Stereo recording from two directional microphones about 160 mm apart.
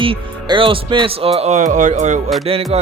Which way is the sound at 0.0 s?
30° right (ahead or behind).